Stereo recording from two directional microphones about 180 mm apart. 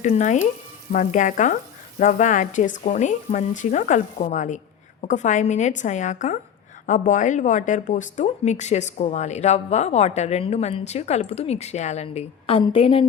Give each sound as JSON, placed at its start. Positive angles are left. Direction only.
{"t": 0.0, "sound": "speech", "side_deg": 40}